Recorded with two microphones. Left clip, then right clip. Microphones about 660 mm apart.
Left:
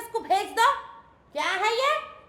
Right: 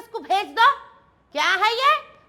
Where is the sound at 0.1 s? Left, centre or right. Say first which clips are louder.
Right 2 dB; right.